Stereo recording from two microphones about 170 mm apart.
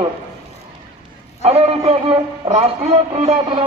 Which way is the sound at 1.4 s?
35° right (ahead or behind).